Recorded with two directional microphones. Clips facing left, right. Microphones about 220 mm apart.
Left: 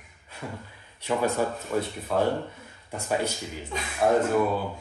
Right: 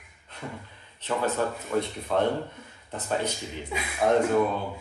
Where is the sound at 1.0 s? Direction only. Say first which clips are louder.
Left 2 dB; 10° left (ahead or behind).